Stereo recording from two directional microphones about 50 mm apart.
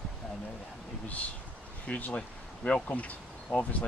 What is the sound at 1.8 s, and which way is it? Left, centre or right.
A man's voice, left.